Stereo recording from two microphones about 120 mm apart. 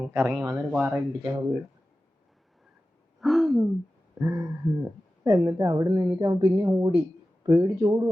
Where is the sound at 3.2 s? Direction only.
Centre (ahead or behind).